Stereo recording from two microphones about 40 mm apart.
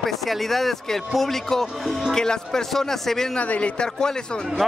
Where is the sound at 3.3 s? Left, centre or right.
Left.